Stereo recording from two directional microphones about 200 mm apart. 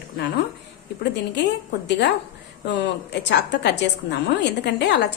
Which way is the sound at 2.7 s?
60° left (ahead or behind).